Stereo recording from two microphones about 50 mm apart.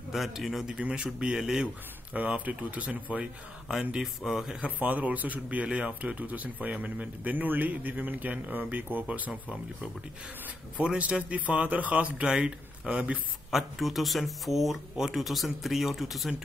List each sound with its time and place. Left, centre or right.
0.1 s speech: centre
0.7 s speech: right
2.1 s speech: right
4.0 s speech: centre
4.6 s speech: right
10.8 s speech: right
12.3 s speech: centre
13.5 s speech: centre